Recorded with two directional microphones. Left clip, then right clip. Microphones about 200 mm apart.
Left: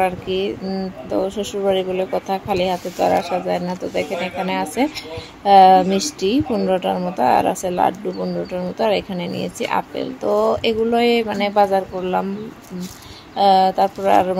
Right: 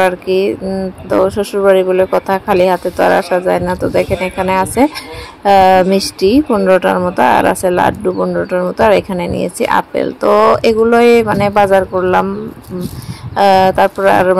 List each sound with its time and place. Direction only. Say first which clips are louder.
0.0 s speech: right 8 dB; 20° right (ahead or behind)
13.4 s speech: right 5 dB; 25° right (ahead or behind)